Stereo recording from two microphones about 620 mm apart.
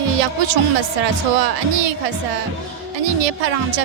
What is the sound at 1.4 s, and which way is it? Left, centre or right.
Speech, right.